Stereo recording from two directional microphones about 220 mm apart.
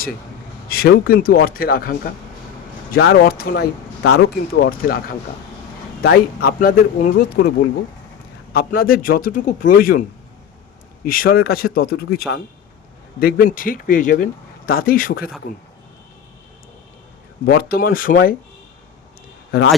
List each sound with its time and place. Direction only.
0.7 s speech: 45° left (ahead or behind)
8.5 s a man's voice: 40° left (ahead or behind)
17.4 s a man's voice: 45° left (ahead or behind)
19.5 s speech: 45° left (ahead or behind)